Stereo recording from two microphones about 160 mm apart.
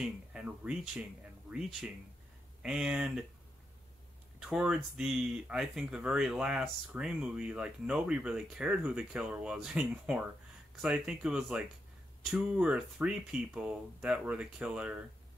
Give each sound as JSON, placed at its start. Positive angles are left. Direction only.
{"t": 0.0, "sound": "speech", "side_deg": -10}
{"t": 4.4, "sound": "speech", "side_deg": -5}